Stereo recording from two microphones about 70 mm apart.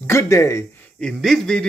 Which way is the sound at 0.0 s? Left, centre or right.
Left.